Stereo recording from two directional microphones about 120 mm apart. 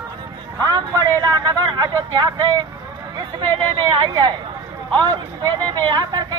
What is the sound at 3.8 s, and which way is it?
Speech, 35° right (ahead or behind).